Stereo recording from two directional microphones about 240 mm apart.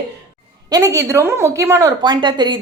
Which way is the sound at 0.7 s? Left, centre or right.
Centre.